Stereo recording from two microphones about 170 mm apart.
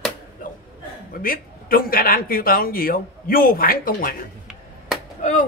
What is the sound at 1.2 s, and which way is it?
Speech, 55° left (ahead or behind).